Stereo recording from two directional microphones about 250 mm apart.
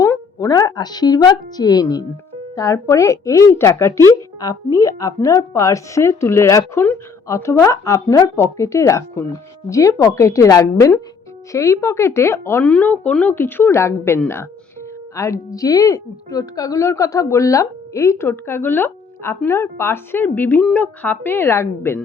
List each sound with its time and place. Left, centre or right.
0.0 s a woman's voice: centre